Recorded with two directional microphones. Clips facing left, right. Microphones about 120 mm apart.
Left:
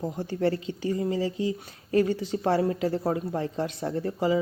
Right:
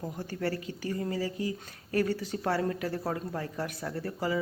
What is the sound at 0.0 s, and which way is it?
A woman's voice, 20° left (ahead or behind).